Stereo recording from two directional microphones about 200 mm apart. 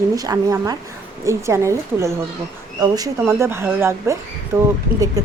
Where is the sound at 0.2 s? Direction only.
20° right (ahead or behind).